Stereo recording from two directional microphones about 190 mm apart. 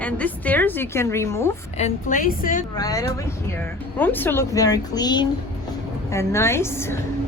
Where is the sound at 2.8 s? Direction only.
20° left (ahead or behind).